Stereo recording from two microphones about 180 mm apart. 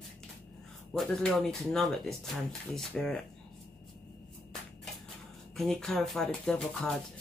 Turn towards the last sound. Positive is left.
turn(degrees=5)  # may be behind; listen again after turning